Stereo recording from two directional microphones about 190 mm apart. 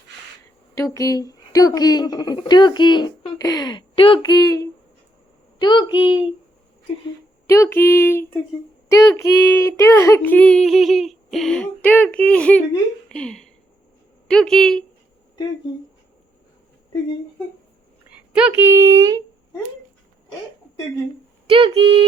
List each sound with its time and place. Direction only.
0.8 s a woman's voice: 20° left (ahead or behind)
7.4 s speech: 15° left (ahead or behind)
13.1 s a sound: 5° left (ahead or behind)
14.3 s speech: 5° left (ahead or behind)
18.3 s speech: 10° right (ahead or behind)
21.4 s speech: 30° right (ahead or behind)